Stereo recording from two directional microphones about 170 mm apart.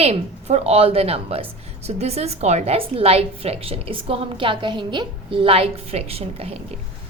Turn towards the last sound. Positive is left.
turn(degrees=-35)  # may be behind; listen again after turning